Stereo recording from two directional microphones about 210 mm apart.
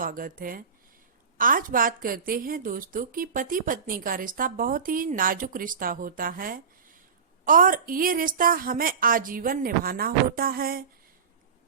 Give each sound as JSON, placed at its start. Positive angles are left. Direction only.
{"t": 0.0, "sound": "a woman's voice", "side_deg": -40}